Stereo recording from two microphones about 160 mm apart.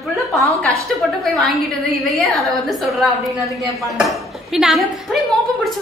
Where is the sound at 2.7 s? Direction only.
Centre (ahead or behind).